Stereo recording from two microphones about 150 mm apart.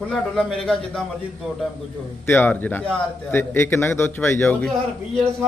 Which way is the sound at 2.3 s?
15° left (ahead or behind).